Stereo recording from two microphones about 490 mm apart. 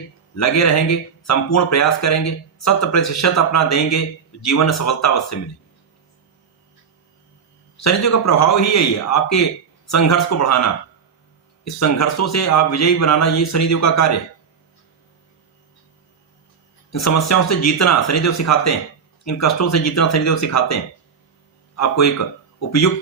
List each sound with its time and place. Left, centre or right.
0.3 s speech: left
7.8 s speech: left
16.9 s speech: left
21.8 s speech: left